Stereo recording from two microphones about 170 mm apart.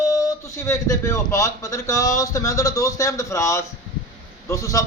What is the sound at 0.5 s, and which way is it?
Speech, 20° left (ahead or behind).